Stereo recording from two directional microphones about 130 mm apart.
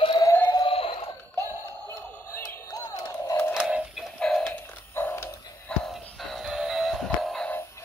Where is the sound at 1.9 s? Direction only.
20° left (ahead or behind).